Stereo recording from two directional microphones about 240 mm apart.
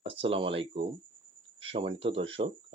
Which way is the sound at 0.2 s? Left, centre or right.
Right.